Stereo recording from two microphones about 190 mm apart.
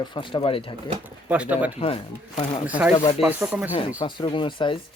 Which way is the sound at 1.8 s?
30° left (ahead or behind).